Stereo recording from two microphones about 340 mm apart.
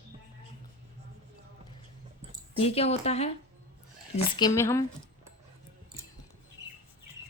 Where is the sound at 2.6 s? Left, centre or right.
Centre.